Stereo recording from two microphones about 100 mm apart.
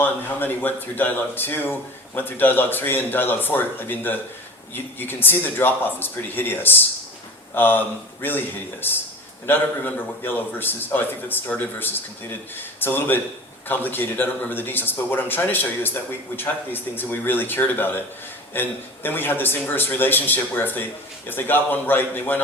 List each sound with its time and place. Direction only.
0.0 s a man's voice: 20° left (ahead or behind)